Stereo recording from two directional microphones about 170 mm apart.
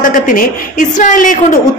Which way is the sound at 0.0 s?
50° left (ahead or behind).